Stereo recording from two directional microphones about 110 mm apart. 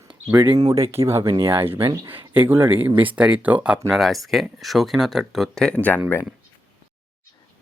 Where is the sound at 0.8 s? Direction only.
25° right (ahead or behind); by 5.7 s centre (ahead or behind).